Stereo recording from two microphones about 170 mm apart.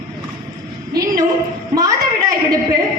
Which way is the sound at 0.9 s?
20° right (ahead or behind).